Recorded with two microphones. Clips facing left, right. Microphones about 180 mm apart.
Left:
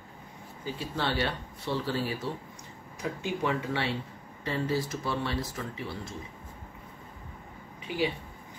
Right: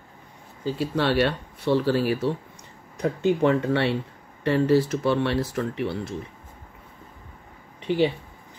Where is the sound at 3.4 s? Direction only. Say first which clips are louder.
Right 7 dB; 60° right (ahead or behind).